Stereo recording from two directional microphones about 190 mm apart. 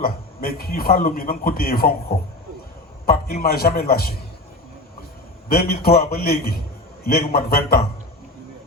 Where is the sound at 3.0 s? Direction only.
50° left (ahead or behind).